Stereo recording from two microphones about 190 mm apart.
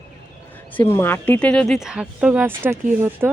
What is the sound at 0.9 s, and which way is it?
Speech, 10° left (ahead or behind).